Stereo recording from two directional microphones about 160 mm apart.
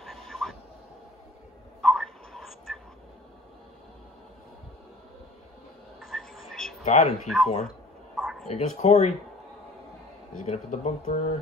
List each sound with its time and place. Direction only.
0.0 s a sound: centre (ahead or behind)
1.8 s tick: centre (ahead or behind)
5.9 s a sound: centre (ahead or behind)
6.8 s speech: 40° left (ahead or behind)
7.2 s speech: centre (ahead or behind)
8.2 s bow-wow: 5° right (ahead or behind)
8.5 s speech: 40° left (ahead or behind)
10.4 s speech: 45° left (ahead or behind)